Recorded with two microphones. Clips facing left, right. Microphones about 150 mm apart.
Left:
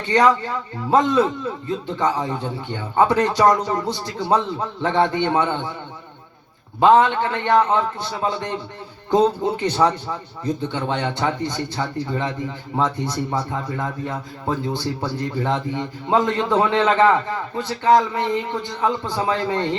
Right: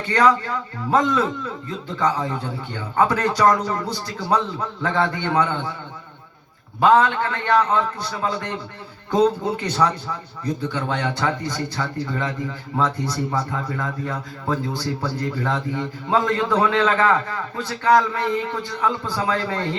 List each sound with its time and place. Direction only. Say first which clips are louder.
0.1 s a man's voice: left 1 dB; 20° left (ahead or behind)
6.7 s a man's voice: left 2 dB; 25° left (ahead or behind)